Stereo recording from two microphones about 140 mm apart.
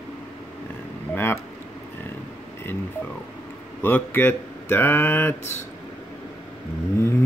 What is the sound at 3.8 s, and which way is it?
Speech, 15° left (ahead or behind).